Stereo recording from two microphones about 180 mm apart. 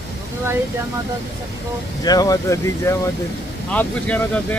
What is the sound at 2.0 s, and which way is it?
Speech, 20° left (ahead or behind).